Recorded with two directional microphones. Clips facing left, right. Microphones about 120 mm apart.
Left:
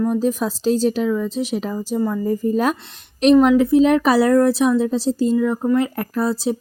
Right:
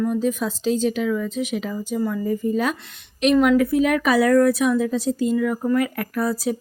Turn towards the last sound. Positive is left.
turn(degrees=25)  # may be behind; listen again after turning